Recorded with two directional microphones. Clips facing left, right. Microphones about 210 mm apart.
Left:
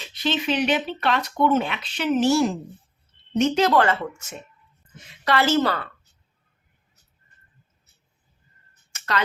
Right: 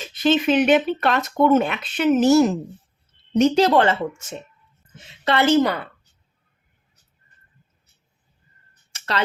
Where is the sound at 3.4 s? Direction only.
30° right (ahead or behind); by 5.9 s 15° right (ahead or behind).